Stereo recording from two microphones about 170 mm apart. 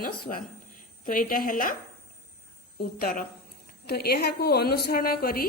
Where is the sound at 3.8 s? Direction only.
70° left (ahead or behind).